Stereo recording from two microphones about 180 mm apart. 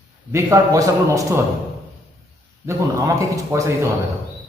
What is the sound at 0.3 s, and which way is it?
Speech, 15° right (ahead or behind).